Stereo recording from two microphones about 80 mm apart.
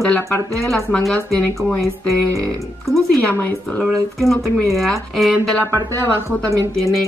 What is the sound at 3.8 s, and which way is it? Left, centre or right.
Speech, centre.